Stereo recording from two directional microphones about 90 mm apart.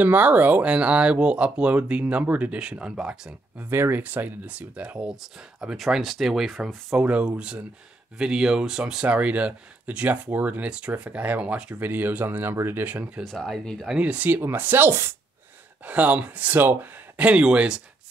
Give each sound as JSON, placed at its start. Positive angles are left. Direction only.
{"t": 0.0, "sound": "speech", "side_deg": -20}
{"t": 3.7, "sound": "speech", "side_deg": -25}
{"t": 13.2, "sound": "speech", "side_deg": 5}
{"t": 13.9, "sound": "speech", "side_deg": -15}
{"t": 15.8, "sound": "speech", "side_deg": -15}